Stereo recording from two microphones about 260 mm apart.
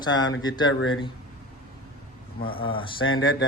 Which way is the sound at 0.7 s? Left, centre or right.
Left.